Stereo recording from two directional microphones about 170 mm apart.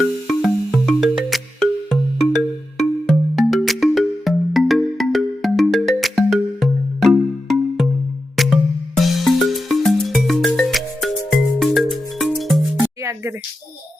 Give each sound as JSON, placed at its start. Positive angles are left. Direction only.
{"t": 0.0, "sound": "music", "side_deg": 0}
{"t": 12.8, "sound": "music", "side_deg": -15}